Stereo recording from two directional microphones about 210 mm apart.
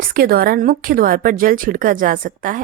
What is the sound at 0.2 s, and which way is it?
A woman's voice, 45° right (ahead or behind).